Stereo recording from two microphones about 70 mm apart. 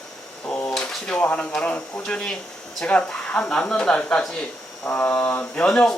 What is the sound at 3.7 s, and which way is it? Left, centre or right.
Speech, centre.